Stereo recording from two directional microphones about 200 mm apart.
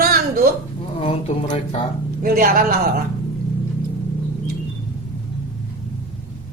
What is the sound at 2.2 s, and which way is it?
Speech, 45° right (ahead or behind).